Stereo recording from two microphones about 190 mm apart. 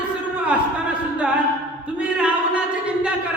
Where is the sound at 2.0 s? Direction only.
5° right (ahead or behind).